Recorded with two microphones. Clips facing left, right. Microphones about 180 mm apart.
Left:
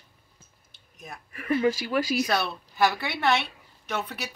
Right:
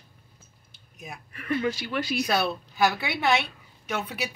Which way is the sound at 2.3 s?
5° right (ahead or behind).